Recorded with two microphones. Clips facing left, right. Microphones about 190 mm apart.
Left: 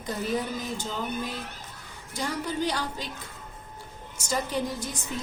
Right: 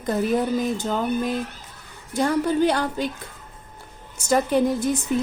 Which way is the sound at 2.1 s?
55° right (ahead or behind).